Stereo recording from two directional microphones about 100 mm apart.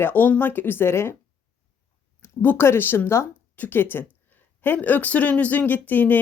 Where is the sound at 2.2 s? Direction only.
25° left (ahead or behind).